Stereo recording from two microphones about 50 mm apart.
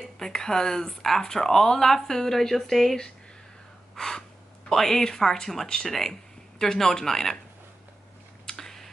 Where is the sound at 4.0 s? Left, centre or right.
Centre.